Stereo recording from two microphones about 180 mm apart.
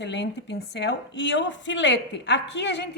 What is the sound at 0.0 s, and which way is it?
A woman's voice, 80° left.